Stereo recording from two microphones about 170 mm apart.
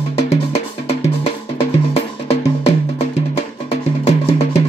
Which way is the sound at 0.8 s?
40° left (ahead or behind).